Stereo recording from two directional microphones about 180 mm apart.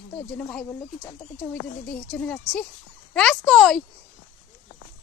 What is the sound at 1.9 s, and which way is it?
Speech, 10° left (ahead or behind).